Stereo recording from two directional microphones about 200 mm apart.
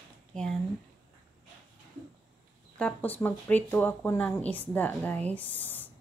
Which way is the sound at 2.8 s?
5° left (ahead or behind).